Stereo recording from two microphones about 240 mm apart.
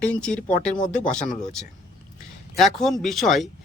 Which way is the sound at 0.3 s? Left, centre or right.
Left.